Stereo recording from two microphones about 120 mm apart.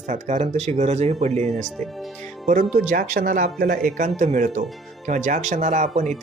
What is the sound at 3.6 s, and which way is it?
Speech, 90° right.